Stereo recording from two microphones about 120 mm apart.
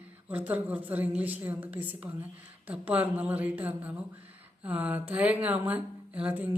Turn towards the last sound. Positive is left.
turn(degrees=-10)  # may be behind; listen again after turning